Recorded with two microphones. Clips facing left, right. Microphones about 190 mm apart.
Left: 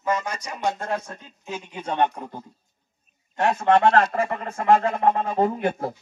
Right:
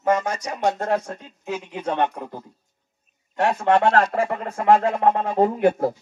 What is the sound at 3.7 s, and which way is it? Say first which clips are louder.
Speech: left 1 dB; 35° right (ahead or behind).